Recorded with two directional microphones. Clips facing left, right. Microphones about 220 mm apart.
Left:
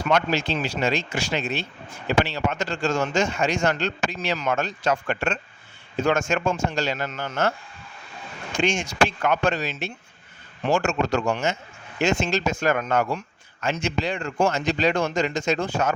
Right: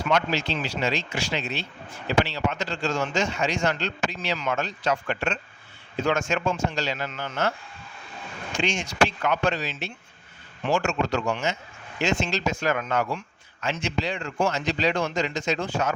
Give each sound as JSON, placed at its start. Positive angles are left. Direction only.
{"t": 0.1, "sound": "speech", "side_deg": 50}
{"t": 8.5, "sound": "speech", "side_deg": 45}